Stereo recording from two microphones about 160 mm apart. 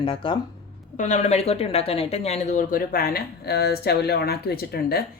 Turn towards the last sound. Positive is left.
turn(degrees=75)  # may be behind; listen again after turning